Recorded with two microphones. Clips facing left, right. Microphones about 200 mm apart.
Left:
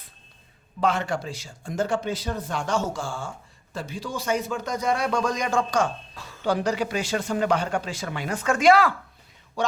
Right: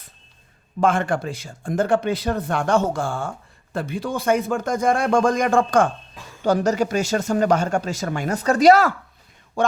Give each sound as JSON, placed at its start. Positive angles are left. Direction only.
{"t": 0.8, "sound": "speech", "side_deg": -50}